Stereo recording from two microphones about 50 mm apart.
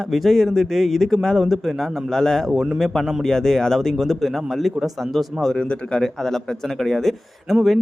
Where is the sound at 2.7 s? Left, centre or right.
Centre.